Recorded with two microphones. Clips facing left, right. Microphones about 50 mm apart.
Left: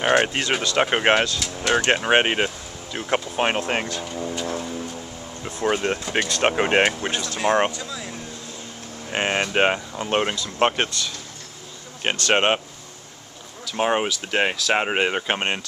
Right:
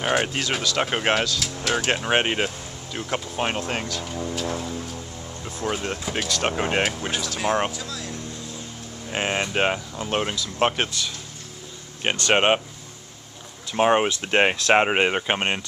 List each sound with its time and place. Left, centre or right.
0.3 s speech: left
1.6 s music: centre
1.9 s speech: centre
3.1 s speech: left
4.0 s music: centre
5.4 s speech: left
7.2 s speech: centre
11.0 s speech: centre
12.2 s speech: centre
13.7 s speech: centre
14.0 s speech: right; by 15.6 s centre